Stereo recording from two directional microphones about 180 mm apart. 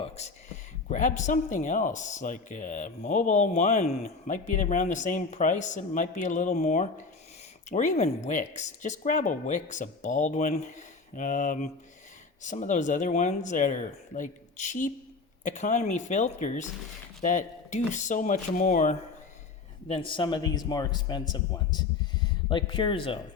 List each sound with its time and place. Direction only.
0.0 s speech: 40° left (ahead or behind)
19.9 s a man's voice: 30° left (ahead or behind)